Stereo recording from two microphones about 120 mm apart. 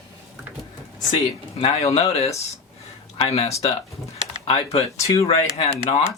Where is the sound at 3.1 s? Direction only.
50° left (ahead or behind).